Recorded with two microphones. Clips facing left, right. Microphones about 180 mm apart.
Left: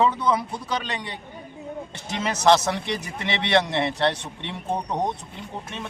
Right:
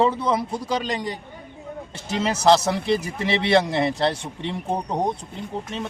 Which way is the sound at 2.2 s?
35° right (ahead or behind).